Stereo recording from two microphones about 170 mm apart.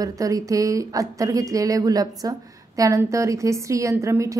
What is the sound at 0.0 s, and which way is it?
A woman's voice, 20° right (ahead or behind).